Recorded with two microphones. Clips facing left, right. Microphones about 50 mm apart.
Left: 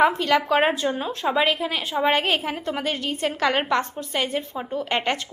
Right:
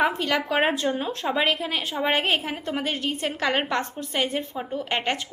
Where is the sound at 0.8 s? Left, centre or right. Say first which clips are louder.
Left 1 dB; centre.